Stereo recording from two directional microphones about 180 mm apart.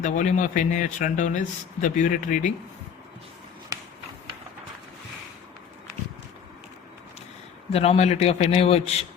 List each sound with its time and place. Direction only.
0.0 s speech: 45° left (ahead or behind)
7.7 s a man's voice: 35° left (ahead or behind)